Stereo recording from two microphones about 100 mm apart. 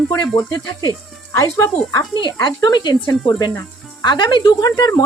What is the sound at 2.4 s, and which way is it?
Speech, 45° left (ahead or behind).